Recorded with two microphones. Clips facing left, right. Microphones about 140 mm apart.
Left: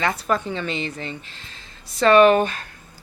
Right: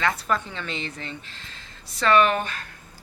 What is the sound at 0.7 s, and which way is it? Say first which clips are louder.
Speech: left 5 dB; 15° left (ahead or behind).